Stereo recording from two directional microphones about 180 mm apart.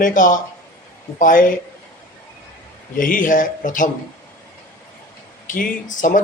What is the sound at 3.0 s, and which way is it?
Speech, 50° left (ahead or behind).